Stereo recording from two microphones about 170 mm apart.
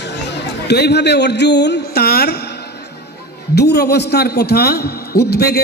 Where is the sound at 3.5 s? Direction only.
75° left (ahead or behind).